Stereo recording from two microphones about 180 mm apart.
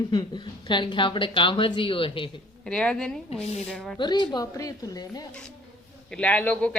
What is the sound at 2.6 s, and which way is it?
A woman's voice, 5° left (ahead or behind).